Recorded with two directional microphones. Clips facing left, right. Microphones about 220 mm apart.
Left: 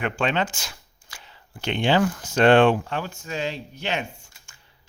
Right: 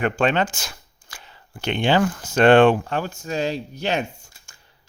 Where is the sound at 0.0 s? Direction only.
45° right (ahead or behind).